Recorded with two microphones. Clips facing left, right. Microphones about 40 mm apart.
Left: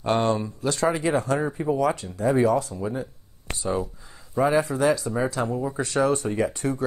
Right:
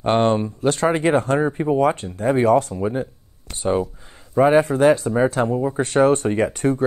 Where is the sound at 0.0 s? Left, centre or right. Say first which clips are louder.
Right 5 dB; right.